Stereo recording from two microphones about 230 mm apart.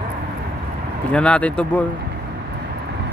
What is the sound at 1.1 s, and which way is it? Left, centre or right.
Speech, centre.